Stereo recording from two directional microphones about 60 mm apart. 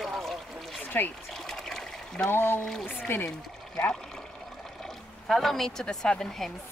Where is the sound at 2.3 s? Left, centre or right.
Left.